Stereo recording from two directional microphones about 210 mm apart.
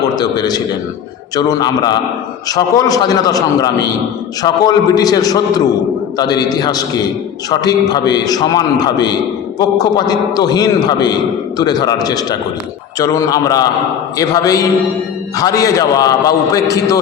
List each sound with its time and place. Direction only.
0.2 s a man's voice: 20° left (ahead or behind)